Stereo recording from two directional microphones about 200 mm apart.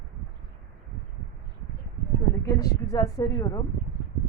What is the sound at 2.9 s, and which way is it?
Speech, 15° left (ahead or behind).